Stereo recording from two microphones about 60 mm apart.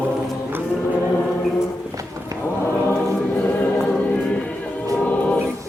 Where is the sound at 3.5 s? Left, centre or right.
Left.